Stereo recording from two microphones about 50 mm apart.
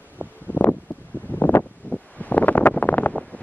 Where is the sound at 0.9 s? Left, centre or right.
Left.